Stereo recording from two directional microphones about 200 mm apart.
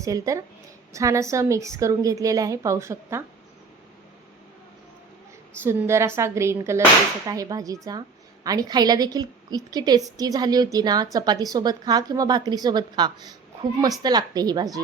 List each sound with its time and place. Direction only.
0.0 s a woman's voice: 15° right (ahead or behind)
5.6 s a woman's voice: 15° right (ahead or behind)